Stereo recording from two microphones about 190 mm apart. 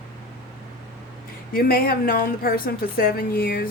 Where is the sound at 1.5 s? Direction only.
50° left (ahead or behind).